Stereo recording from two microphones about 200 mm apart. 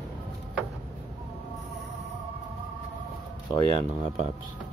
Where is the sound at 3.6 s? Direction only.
35° right (ahead or behind).